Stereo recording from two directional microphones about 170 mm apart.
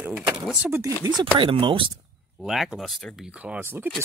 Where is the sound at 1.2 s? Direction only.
30° right (ahead or behind).